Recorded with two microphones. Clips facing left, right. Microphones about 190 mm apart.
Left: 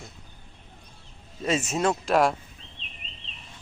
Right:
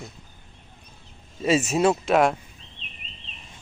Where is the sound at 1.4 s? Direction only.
10° right (ahead or behind).